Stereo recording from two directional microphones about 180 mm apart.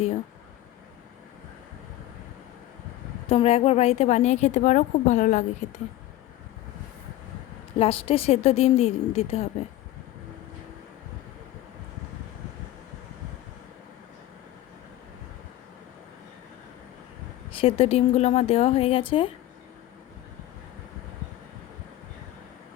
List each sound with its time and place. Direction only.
3.2 s a woman's voice: 35° left (ahead or behind)
7.8 s a woman's voice: 30° left (ahead or behind)
17.5 s a woman's voice: 30° left (ahead or behind)